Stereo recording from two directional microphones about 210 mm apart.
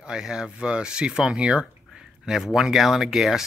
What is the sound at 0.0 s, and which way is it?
Speech, 5° right (ahead or behind).